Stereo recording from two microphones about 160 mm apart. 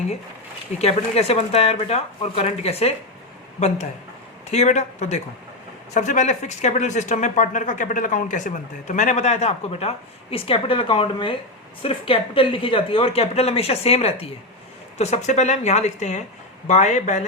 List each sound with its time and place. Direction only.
0.8 s speech: 40° left (ahead or behind)
4.4 s speech: 45° left (ahead or behind)